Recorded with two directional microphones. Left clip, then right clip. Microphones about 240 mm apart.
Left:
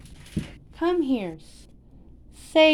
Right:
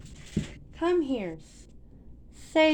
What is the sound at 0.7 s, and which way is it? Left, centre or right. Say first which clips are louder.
A woman's voice: left 3 dB; left.